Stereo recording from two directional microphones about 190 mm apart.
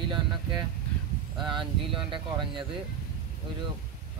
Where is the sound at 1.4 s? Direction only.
25° right (ahead or behind).